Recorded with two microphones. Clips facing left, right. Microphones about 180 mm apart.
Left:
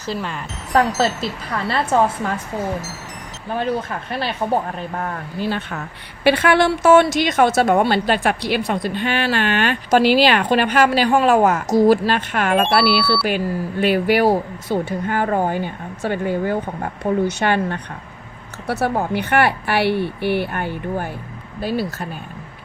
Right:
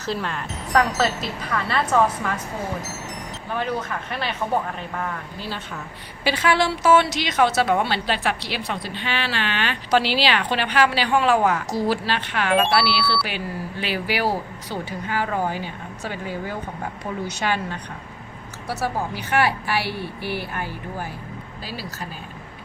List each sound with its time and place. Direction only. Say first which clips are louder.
0.0 s speech: left 1 dB; centre (ahead or behind)
0.7 s speech: left 3 dB; 30° left (ahead or behind)
3.5 s speech: left 4 dB; 30° left (ahead or behind)
5.5 s a woman's voice: left 6 dB; 60° left (ahead or behind)